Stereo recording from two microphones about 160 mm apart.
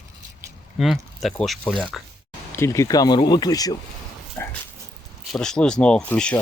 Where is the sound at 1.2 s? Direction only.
Centre (ahead or behind).